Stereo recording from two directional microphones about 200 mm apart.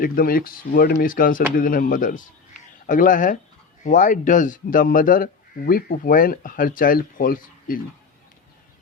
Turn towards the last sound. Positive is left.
turn(degrees=45)  # may be behind; listen again after turning